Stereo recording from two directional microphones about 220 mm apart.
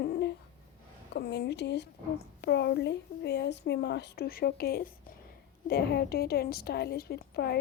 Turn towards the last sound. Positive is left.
turn(degrees=45)  # may be behind; listen again after turning